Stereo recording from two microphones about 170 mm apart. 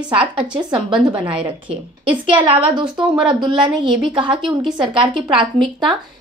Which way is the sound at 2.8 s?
5° right (ahead or behind).